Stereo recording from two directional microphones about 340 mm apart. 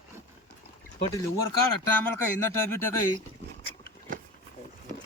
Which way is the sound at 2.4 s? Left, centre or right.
Centre.